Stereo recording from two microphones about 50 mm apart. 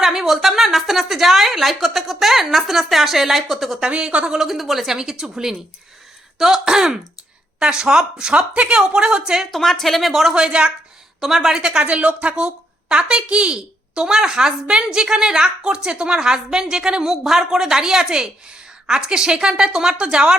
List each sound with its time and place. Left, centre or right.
0.0 s a woman's voice: centre
3.8 s a woman's voice: centre
4.4 s a woman's voice: centre
9.5 s a woman's voice: centre
10.3 s a woman's voice: centre
11.2 s a woman's voice: centre